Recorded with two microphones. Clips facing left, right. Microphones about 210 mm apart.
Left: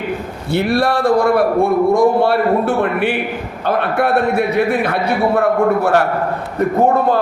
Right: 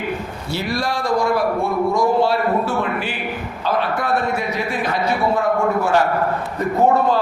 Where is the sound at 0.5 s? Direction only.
65° left (ahead or behind).